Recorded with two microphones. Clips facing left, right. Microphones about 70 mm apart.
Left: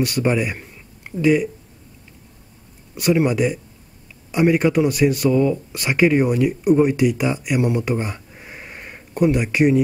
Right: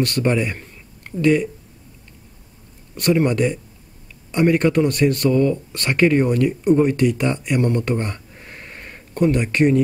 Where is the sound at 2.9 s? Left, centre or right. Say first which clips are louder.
Even; centre.